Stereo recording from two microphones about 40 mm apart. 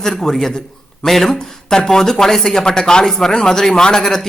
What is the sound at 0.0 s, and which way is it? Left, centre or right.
Speech, centre.